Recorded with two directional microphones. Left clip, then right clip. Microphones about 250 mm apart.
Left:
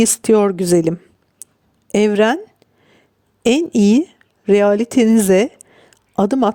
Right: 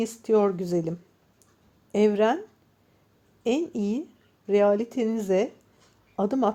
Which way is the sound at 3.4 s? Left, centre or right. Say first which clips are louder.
Left 12 dB; left.